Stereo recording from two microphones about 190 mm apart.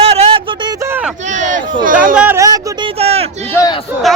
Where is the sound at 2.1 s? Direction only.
10° right (ahead or behind).